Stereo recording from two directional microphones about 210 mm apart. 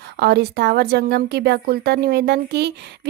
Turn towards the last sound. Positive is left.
turn(degrees=-50)  # may be behind; listen again after turning